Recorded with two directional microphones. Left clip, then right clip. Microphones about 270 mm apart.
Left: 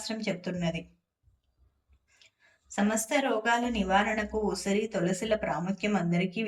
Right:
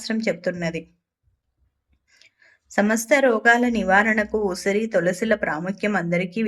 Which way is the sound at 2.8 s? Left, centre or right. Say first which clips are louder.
Right 10 dB; centre.